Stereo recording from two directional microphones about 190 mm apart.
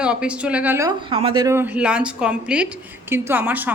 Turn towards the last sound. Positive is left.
turn(degrees=-10)  # may be behind; listen again after turning